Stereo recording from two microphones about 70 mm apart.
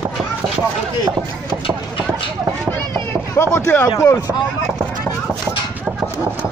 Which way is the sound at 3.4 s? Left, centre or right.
Left.